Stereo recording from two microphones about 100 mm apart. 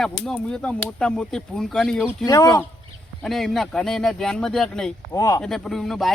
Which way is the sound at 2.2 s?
40° left (ahead or behind).